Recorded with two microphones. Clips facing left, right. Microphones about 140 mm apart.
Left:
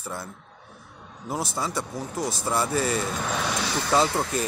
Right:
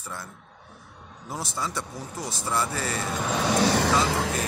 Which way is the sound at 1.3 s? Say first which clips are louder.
Left 3 dB; 15° left (ahead or behind).